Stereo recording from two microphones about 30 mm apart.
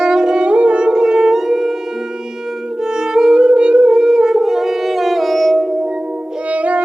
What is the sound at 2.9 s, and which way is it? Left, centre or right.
Music, right.